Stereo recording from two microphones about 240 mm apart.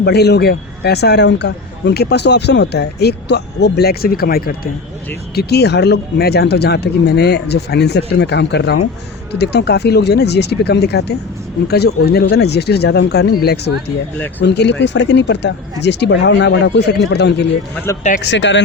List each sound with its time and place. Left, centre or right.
0.0 s a man's voice: left